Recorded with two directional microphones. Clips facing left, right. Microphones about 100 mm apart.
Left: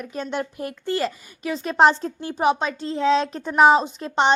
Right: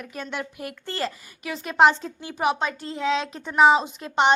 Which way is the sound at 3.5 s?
5° left (ahead or behind).